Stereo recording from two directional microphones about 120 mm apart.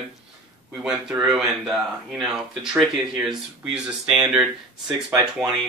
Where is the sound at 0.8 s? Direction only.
5° right (ahead or behind).